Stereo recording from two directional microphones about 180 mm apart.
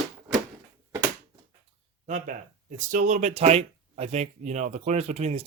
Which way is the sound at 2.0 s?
40° right (ahead or behind).